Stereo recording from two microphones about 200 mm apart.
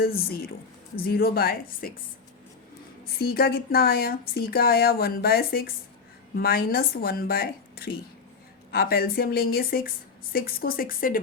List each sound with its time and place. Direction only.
0.3 s speech: 50° left (ahead or behind)
3.2 s speech: 50° left (ahead or behind)